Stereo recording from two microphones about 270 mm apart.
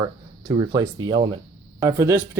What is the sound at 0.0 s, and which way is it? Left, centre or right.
Speech, centre.